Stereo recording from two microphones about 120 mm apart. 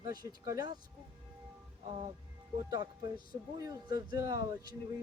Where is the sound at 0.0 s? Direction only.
30° right (ahead or behind).